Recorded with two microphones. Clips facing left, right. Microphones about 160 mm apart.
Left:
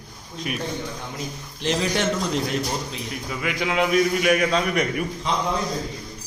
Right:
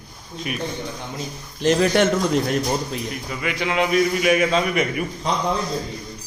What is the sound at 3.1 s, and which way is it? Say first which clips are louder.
A man's voice: right 1 dB; centre (ahead or behind).